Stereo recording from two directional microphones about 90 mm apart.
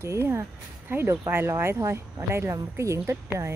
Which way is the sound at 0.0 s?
30° right (ahead or behind).